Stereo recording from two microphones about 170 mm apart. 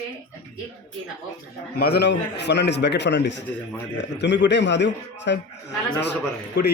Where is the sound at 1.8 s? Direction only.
70° left (ahead or behind); by 5.4 s 90° left.